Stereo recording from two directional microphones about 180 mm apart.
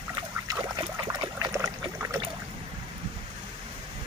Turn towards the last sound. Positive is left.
turn(degrees=-20)  # may be behind; listen again after turning